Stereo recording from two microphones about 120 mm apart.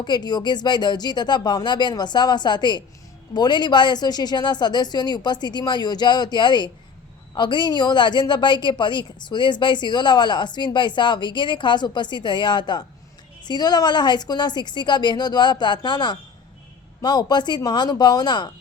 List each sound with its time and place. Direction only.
0.0 s a woman's voice: 35° left (ahead or behind)